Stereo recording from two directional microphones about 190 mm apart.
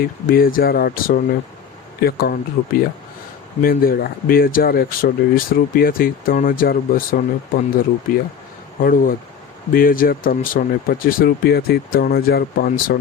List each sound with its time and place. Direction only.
0.0 s speech: 50° left (ahead or behind)